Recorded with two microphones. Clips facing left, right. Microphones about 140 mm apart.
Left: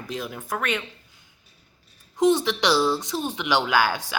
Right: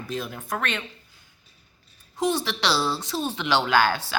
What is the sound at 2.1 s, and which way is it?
Speech, 20° left (ahead or behind).